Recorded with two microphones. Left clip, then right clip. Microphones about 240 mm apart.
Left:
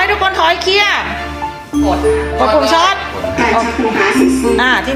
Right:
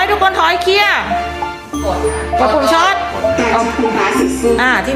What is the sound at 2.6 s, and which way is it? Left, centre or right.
Speech, centre.